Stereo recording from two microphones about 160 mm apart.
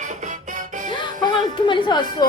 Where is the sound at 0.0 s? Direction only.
55° right (ahead or behind).